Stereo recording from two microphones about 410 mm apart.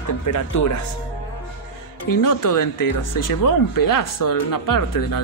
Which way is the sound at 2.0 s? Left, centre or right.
Left.